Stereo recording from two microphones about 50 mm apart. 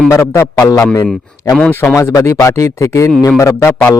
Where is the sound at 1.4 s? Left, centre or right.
Left.